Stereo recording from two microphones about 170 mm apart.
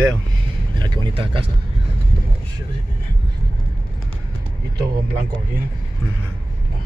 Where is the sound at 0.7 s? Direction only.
25° right (ahead or behind).